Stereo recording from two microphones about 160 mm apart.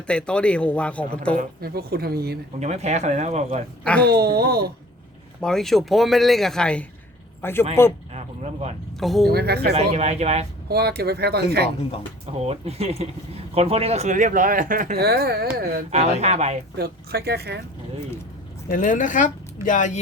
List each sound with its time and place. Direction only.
0.1 s speech: 5° left (ahead or behind)
1.4 s speech: 70° right (ahead or behind)
2.6 s speech: 45° right (ahead or behind)
4.0 s speech: 85° right
5.4 s speech: 5° left (ahead or behind)
8.1 s a sound: 45° right (ahead or behind)
9.0 s a woman's voice: centre (ahead or behind)
9.3 s speech: 80° right
9.7 s speech: 40° right (ahead or behind)
10.7 s speech: 80° right
12.5 s speech: 40° right (ahead or behind); by 15.4 s 80° right
15.9 s speech: 45° right (ahead or behind)
16.7 s speech: 80° right
18.7 s a woman's voice: 55° left (ahead or behind)